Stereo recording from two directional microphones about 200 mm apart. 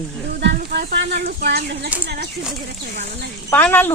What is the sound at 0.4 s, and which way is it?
Music, 55° right (ahead or behind).